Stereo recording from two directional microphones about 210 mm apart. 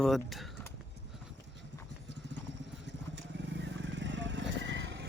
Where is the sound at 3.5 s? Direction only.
55° right (ahead or behind).